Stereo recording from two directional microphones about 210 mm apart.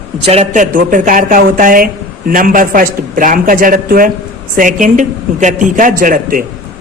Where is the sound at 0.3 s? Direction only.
35° right (ahead or behind).